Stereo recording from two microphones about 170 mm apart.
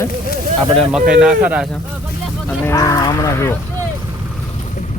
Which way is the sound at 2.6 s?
20° left (ahead or behind).